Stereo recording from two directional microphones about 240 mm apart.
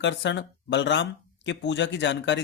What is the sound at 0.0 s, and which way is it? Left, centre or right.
A man's voice, left.